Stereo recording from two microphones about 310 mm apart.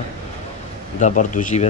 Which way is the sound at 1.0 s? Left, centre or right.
Left.